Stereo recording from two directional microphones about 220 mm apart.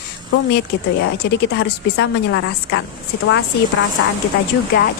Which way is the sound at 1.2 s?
50° left (ahead or behind).